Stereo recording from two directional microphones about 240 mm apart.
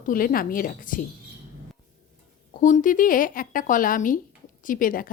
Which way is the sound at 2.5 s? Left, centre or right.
Left.